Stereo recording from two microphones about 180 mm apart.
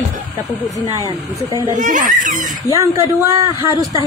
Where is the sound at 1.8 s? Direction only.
50° right (ahead or behind).